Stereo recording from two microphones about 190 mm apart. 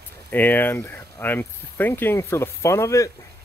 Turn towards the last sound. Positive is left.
turn(degrees=15)  # may be behind; listen again after turning